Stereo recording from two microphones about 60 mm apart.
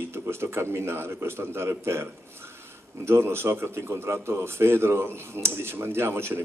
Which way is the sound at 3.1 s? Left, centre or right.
Right.